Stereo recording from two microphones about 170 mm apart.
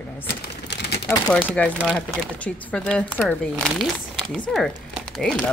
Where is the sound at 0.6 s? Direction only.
80° left.